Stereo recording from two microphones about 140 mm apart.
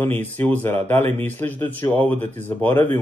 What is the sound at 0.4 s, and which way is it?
Speech, 15° left (ahead or behind).